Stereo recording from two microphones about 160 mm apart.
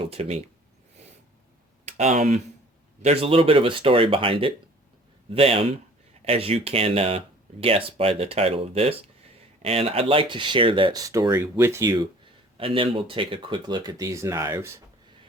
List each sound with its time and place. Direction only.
0.0 s speech: 35° right (ahead or behind)
1.8 s speech: 45° right (ahead or behind); by 12.0 s 25° right (ahead or behind)
12.5 s speech: 35° right (ahead or behind); by 14.7 s 15° right (ahead or behind)